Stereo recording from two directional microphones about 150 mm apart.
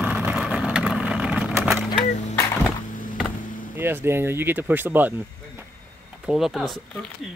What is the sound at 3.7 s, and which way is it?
Speech, 15° right (ahead or behind).